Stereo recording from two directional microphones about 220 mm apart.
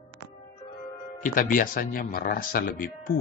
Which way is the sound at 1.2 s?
40° left (ahead or behind).